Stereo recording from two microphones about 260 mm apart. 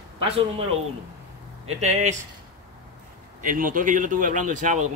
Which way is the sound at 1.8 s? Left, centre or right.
Right.